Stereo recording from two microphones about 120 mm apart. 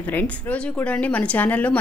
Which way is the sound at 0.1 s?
15° left (ahead or behind).